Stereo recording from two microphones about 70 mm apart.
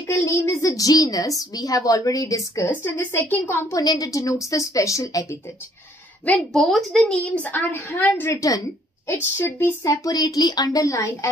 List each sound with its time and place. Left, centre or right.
0.5 s a woman's voice: left
2.6 s a woman's voice: left
3.7 s a woman's voice: left
6.5 s a woman's voice: centre
7.1 s a woman's voice: centre
7.5 s a woman's voice: left
8.4 s speech: left
9.0 s a woman's voice: left
9.8 s a woman's voice: left
10.8 s speech: left